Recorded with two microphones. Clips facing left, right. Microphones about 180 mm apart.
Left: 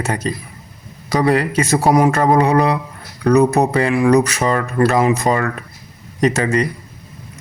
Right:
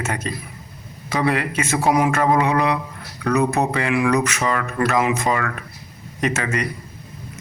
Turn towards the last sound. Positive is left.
turn(degrees=35)  # may be behind; listen again after turning